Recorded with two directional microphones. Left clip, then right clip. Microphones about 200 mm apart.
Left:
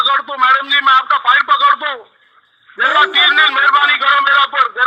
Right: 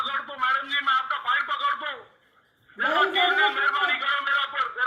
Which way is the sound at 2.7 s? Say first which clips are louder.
Left 11 dB; 45° left (ahead or behind).